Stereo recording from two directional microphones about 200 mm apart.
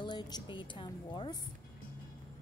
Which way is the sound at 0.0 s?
20° left (ahead or behind).